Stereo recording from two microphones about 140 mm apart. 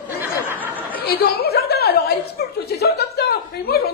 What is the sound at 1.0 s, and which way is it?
Speech, 90° left.